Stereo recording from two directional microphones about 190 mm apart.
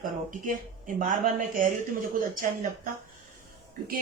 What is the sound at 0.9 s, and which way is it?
Speech, 45° right (ahead or behind).